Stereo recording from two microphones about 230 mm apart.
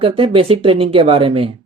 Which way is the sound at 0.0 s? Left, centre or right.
Right.